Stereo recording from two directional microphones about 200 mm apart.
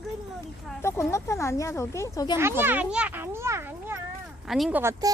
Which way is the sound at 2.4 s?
10° right (ahead or behind).